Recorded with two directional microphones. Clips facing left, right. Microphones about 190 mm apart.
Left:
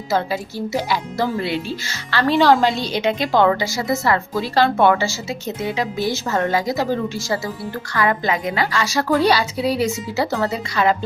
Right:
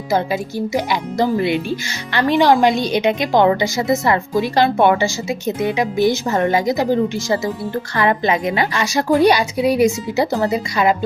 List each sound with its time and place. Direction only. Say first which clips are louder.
0.1 s a woman's voice: right 3 dB; 15° right (ahead or behind)